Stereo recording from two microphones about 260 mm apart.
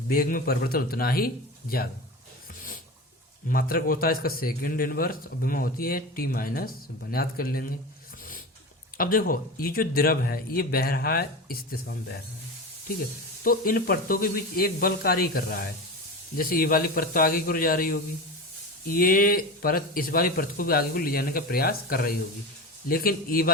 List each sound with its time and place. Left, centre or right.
0.1 s speech: left
3.5 s speech: left
9.0 s speech: left
13.4 s speech: left